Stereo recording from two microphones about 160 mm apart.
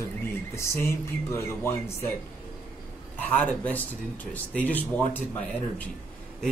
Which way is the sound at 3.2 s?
10° left (ahead or behind).